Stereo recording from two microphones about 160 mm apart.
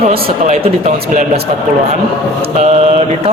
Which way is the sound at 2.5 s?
45° right (ahead or behind).